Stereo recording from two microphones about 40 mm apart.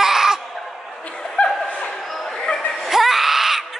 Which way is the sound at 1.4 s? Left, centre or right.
Left.